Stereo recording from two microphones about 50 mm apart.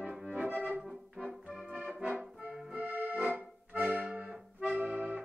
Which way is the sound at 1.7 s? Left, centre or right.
Right.